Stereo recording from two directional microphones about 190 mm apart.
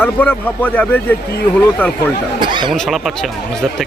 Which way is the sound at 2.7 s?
5° left (ahead or behind).